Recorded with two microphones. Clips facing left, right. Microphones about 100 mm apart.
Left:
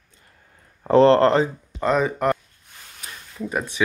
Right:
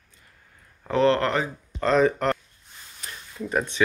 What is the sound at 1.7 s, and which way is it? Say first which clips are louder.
Speech: right 1 dB; 10° left (ahead or behind).